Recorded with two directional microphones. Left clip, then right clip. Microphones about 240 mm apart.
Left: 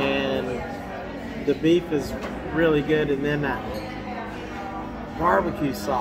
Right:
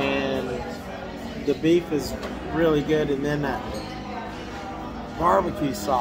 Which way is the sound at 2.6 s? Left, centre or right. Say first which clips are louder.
Left 1 dB; centre.